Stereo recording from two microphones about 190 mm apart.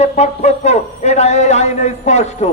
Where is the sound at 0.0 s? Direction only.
35° left (ahead or behind).